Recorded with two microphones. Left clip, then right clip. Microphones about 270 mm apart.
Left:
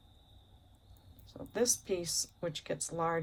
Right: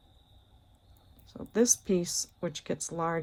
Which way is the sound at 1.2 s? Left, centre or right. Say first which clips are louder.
Right 6 dB; right.